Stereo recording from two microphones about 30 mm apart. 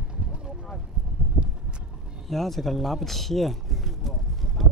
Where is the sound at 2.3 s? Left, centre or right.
Centre.